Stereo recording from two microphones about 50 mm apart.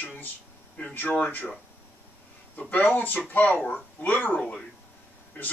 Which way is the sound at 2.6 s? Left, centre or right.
Left.